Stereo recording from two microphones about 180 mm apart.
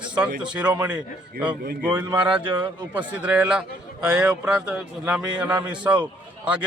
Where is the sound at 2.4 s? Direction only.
25° right (ahead or behind).